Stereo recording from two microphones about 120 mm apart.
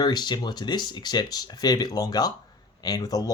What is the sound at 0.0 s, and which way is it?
Speech, 35° left (ahead or behind).